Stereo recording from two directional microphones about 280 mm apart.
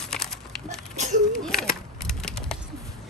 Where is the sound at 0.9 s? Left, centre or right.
Right.